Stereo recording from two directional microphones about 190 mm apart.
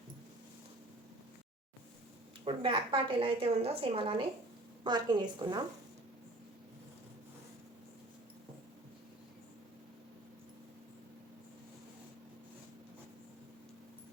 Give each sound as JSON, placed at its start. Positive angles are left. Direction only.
{"t": 2.4, "sound": "a woman's voice", "side_deg": -25}